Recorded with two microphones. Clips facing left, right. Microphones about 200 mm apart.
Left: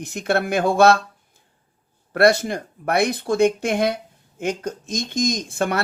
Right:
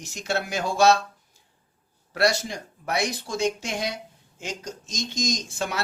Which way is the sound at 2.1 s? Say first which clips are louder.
Left 7 dB; 55° left (ahead or behind).